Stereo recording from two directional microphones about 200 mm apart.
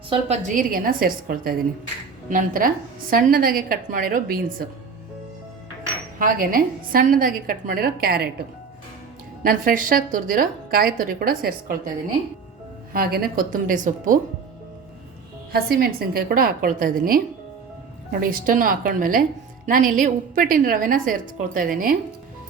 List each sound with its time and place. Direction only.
0.1 s a woman's voice: 35° right (ahead or behind)
6.1 s a woman's voice: 45° right (ahead or behind)
12.9 s a woman's voice: 50° right (ahead or behind)
15.5 s a woman's voice: 50° right (ahead or behind)